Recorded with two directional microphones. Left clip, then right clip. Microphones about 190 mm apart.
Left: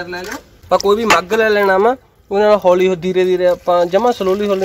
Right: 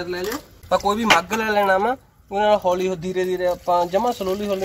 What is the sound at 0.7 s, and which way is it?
Speech, 35° left (ahead or behind).